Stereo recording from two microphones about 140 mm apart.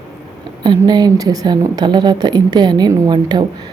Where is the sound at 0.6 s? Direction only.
30° right (ahead or behind).